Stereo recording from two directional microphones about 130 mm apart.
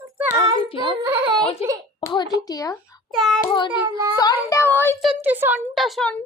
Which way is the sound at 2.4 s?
30° left (ahead or behind).